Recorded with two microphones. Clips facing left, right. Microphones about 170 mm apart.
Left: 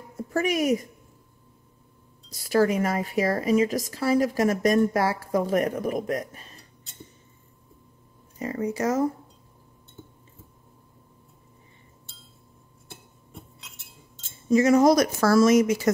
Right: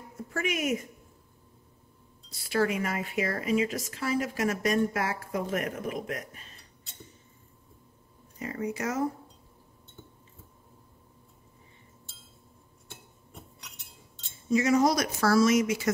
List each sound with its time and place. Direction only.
0.3 s speech: 35° left (ahead or behind)
2.3 s speech: 40° left (ahead or behind)
8.4 s speech: 35° left (ahead or behind)
14.5 s speech: 45° left (ahead or behind)